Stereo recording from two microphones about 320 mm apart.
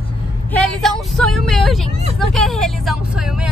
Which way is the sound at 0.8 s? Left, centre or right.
Centre.